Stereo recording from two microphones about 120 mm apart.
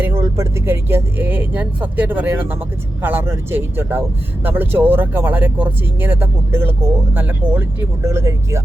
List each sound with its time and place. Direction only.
0.0 s speech: 20° right (ahead or behind)